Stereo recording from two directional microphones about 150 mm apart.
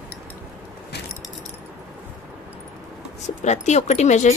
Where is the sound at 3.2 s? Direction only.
50° left (ahead or behind).